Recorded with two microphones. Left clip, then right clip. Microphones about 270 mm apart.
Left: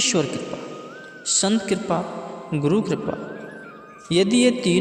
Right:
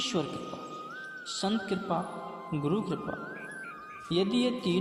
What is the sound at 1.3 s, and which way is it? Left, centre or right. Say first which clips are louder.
A man's voice: left 10 dB; left.